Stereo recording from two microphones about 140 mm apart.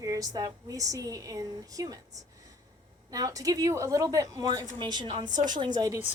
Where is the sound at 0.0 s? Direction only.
25° right (ahead or behind).